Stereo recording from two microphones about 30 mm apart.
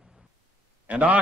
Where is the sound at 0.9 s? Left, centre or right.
Right.